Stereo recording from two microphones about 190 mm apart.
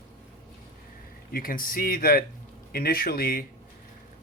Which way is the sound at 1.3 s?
50° left (ahead or behind).